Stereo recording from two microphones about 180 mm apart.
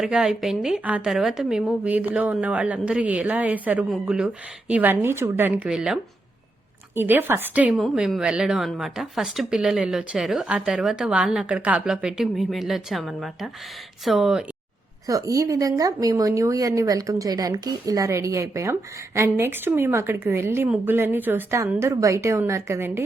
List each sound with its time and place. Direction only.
0.0 s speech: 5° right (ahead or behind)
15.0 s speech: 20° right (ahead or behind)